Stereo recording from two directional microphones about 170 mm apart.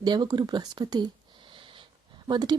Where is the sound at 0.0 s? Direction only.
25° right (ahead or behind).